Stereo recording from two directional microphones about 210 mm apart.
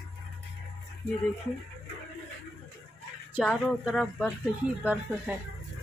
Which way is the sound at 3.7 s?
Centre (ahead or behind).